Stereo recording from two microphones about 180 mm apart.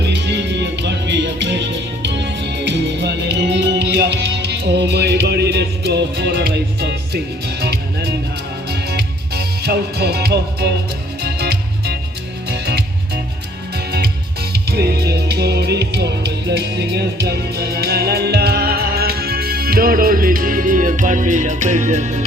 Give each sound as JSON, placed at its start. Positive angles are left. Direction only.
{"t": 0.0, "sound": "music", "side_deg": -75}